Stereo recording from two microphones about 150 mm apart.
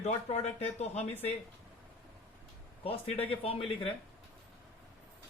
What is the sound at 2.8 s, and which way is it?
Speech, 40° left (ahead or behind).